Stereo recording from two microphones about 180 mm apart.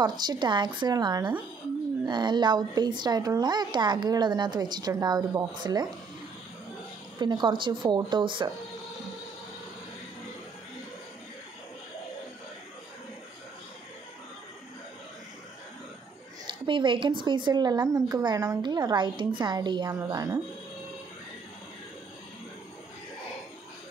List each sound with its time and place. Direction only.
0.0 s a woman's voice: 25° right (ahead or behind)
7.2 s a woman's voice: 25° right (ahead or behind)
16.4 s a woman's voice: 25° right (ahead or behind)